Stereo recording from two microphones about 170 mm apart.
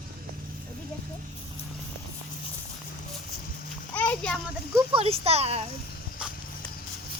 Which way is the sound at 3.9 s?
10° left (ahead or behind).